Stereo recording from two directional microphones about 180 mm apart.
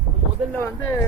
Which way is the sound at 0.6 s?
15° left (ahead or behind).